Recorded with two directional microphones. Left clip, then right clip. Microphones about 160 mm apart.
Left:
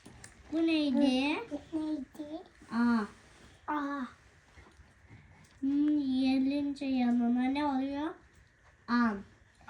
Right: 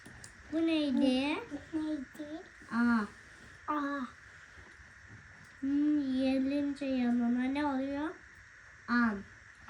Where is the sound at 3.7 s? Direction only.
Centre (ahead or behind).